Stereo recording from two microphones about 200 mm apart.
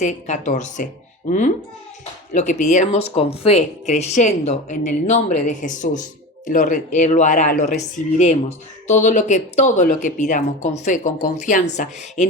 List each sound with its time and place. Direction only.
0.0 s speech: 35° left (ahead or behind)